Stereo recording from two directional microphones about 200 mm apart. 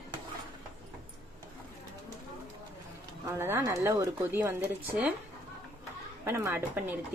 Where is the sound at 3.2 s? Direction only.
10° right (ahead or behind).